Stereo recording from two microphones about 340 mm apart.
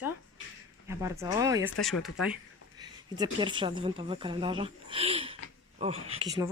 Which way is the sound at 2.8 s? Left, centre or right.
Centre.